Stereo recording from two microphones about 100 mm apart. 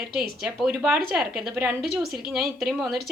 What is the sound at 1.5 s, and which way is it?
Speech, 20° right (ahead or behind).